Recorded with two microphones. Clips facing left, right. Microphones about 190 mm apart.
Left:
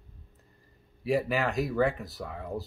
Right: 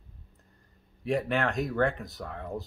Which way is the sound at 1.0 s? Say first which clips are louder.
Left 1 dB; 5° left (ahead or behind).